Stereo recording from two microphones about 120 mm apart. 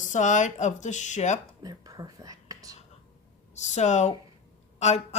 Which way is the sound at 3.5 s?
75° left (ahead or behind).